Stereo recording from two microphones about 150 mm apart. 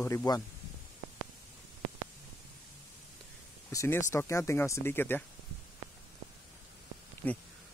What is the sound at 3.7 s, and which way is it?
Speech, 20° left (ahead or behind).